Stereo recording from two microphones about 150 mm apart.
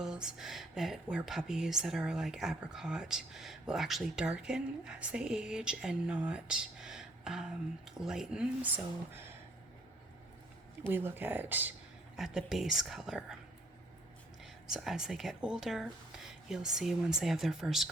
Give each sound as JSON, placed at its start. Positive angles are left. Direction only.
{"t": 0.0, "sound": "speech", "side_deg": -5}
{"t": 10.8, "sound": "speech", "side_deg": -15}
{"t": 12.1, "sound": "speech", "side_deg": 0}
{"t": 14.4, "sound": "speech", "side_deg": 0}